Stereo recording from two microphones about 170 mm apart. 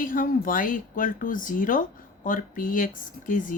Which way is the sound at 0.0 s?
55° left (ahead or behind).